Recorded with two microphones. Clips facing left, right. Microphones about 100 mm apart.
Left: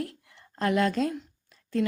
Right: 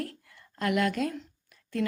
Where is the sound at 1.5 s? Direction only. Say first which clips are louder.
Left 3 dB; 25° left (ahead or behind).